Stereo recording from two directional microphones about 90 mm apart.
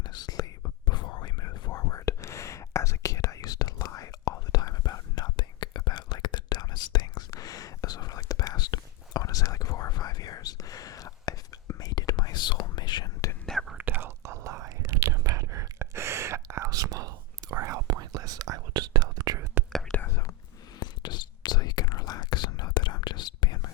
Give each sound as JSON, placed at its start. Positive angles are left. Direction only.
{"t": 0.0, "sound": "whispering", "side_deg": 55}
{"t": 13.4, "sound": "whispering", "side_deg": 0}
{"t": 13.7, "sound": "whispering", "side_deg": -20}
{"t": 14.2, "sound": "whispering", "side_deg": -35}
{"t": 20.1, "sound": "whispering", "side_deg": 30}
{"t": 20.7, "sound": "whispering", "side_deg": 55}